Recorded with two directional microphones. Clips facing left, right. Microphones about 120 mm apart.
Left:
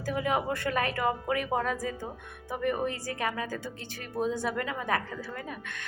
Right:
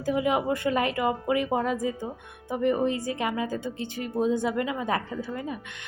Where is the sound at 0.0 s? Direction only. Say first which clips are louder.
Right 4 dB; 20° right (ahead or behind).